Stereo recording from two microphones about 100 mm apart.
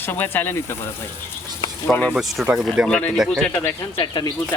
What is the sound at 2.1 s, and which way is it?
Speech, 5° right (ahead or behind).